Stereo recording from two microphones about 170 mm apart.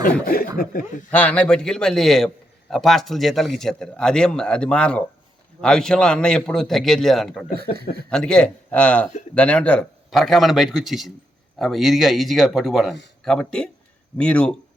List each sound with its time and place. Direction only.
0.3 s speech: 60° left (ahead or behind)
1.1 s a man's voice: 10° left (ahead or behind)